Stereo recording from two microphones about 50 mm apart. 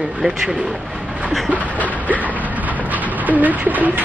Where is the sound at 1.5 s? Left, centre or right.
Right.